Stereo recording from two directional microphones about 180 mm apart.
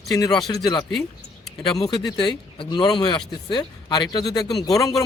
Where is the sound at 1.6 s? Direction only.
25° left (ahead or behind).